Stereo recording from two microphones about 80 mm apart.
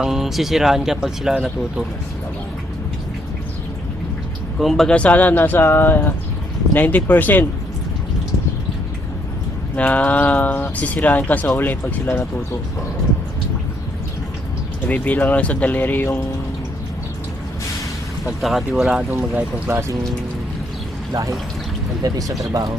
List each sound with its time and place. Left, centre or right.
0.0 s speech: centre
4.5 s speech: centre
4.9 s speech: centre
5.3 s speech: left
9.7 s speech: centre
14.8 s speech: centre
18.3 s speech: centre
19.4 s speech: centre
21.1 s speech: right